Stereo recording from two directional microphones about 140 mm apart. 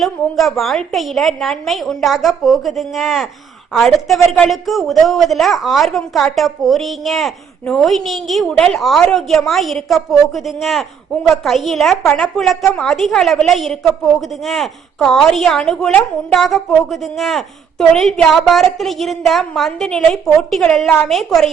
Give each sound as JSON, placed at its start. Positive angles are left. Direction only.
{"t": 0.0, "sound": "a woman's voice", "side_deg": 0}